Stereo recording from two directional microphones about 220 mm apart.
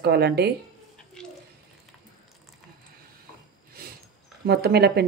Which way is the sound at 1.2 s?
5° left (ahead or behind).